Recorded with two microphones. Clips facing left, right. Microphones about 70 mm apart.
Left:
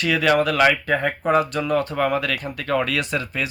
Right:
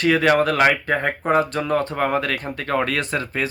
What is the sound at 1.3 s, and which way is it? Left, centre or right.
A man's voice, right.